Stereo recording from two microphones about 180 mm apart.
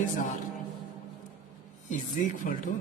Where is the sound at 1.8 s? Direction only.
45° left (ahead or behind).